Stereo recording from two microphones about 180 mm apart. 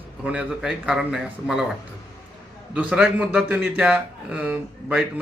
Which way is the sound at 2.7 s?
5° right (ahead or behind).